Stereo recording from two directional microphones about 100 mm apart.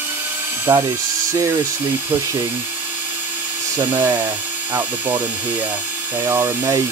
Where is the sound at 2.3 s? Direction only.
20° right (ahead or behind).